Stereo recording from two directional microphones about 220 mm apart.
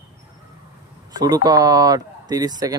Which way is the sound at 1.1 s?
15° right (ahead or behind).